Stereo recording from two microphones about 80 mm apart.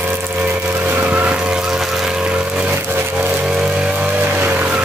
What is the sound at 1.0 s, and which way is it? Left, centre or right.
Vehicle, centre.